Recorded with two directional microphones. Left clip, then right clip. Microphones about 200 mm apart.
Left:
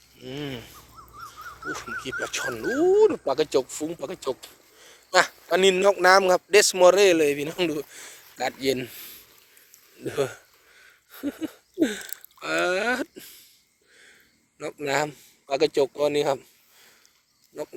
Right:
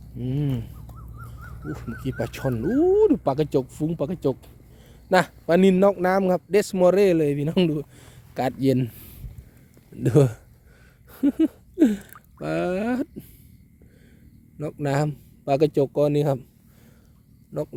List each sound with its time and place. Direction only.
0.3 s a sound: 10° right (ahead or behind)
2.0 s a man's voice: 20° right (ahead or behind)
14.6 s a man's voice: 20° right (ahead or behind)